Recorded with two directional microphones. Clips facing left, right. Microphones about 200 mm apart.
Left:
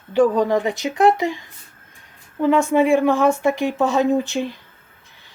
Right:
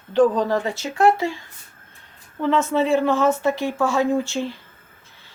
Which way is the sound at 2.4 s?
15° left (ahead or behind).